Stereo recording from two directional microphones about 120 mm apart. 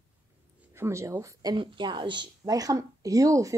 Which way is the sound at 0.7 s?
25° right (ahead or behind).